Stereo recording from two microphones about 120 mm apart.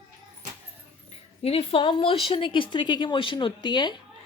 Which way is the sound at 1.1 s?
55° left (ahead or behind).